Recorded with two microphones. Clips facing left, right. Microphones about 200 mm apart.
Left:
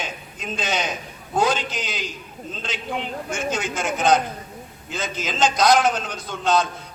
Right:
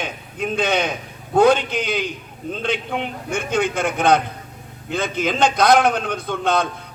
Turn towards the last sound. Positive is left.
turn(degrees=-55)  # may be behind; listen again after turning